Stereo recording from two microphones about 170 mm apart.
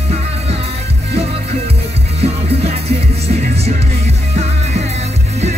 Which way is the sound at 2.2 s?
35° right (ahead or behind).